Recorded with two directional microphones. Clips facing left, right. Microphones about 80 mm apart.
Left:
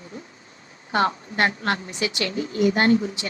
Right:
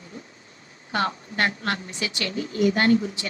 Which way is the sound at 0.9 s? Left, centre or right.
Left.